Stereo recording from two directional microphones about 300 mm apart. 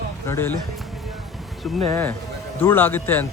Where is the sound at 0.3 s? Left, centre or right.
Centre.